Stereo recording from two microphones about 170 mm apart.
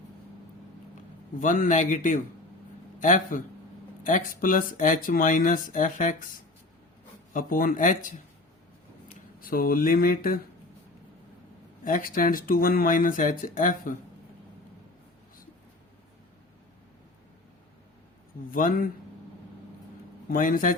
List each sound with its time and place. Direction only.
1.4 s speech: 50° left (ahead or behind)
7.3 s speech: 55° left (ahead or behind)
9.4 s speech: 60° left (ahead or behind)
11.9 s speech: 55° left (ahead or behind)
18.5 s speech: 55° left (ahead or behind)
20.3 s speech: 50° left (ahead or behind)